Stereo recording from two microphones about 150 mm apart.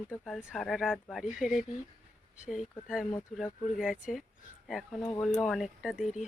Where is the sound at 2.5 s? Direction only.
5° right (ahead or behind).